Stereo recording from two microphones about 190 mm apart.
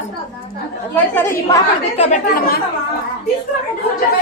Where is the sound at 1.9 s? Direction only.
35° left (ahead or behind).